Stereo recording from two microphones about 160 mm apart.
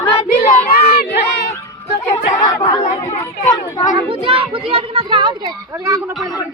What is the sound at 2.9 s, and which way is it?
Chatter, 45° left (ahead or behind).